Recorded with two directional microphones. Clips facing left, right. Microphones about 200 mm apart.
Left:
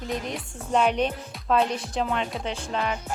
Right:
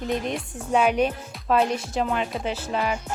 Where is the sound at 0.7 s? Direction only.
10° right (ahead or behind).